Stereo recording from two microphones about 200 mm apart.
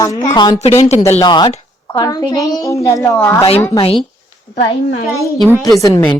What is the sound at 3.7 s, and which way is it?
Speech, 30° left (ahead or behind).